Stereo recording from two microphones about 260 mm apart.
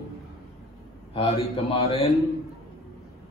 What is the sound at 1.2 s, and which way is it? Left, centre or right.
Speech, left.